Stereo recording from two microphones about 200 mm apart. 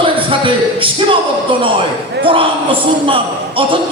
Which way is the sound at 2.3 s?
25° right (ahead or behind).